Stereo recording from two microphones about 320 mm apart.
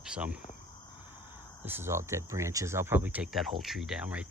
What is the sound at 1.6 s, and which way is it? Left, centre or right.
Speech, centre.